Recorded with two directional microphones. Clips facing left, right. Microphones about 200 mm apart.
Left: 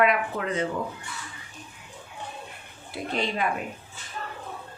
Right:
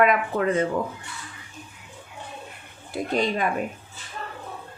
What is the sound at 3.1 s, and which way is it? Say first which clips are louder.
Speech: right 4 dB; 45° right (ahead or behind).